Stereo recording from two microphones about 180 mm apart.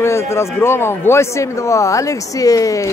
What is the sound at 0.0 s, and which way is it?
Speech, 15° left (ahead or behind).